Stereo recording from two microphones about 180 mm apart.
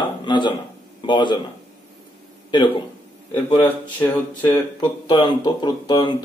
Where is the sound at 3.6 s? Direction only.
10° left (ahead or behind).